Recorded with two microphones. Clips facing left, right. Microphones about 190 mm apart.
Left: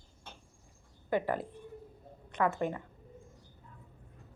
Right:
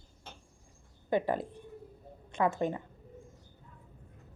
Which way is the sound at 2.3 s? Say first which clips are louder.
Right 1 dB; 25° right (ahead or behind).